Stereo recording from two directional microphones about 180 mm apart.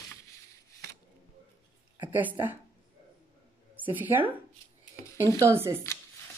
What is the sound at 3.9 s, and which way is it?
Speech, 10° right (ahead or behind).